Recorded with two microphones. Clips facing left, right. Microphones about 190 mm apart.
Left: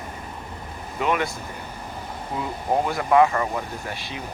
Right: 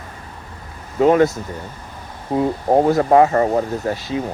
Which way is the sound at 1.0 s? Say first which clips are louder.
Right 11 dB; 40° right (ahead or behind).